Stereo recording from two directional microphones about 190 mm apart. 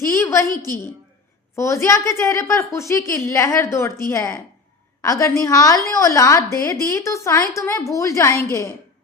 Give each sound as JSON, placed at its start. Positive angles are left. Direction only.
{"t": 0.2, "sound": "a woman's voice", "side_deg": 15}
{"t": 1.5, "sound": "a woman's voice", "side_deg": 15}